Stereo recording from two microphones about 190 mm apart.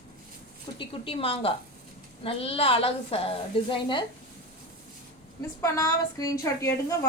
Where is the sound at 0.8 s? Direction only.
30° left (ahead or behind).